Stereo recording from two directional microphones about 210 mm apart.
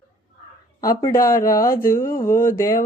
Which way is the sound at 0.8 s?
15° left (ahead or behind).